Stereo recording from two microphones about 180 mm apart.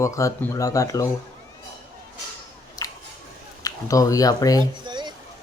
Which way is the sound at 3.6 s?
20° left (ahead or behind).